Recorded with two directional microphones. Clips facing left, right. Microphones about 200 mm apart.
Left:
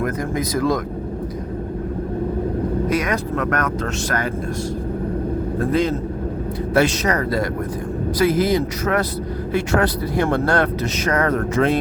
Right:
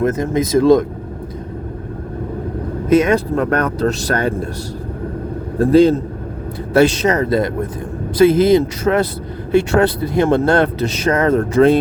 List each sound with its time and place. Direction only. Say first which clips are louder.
0.0 s speech: right 6 dB; 25° right (ahead or behind)
2.9 s speech: right 8 dB; 25° right (ahead or behind)
5.7 s a man's voice: right 11 dB; 30° right (ahead or behind)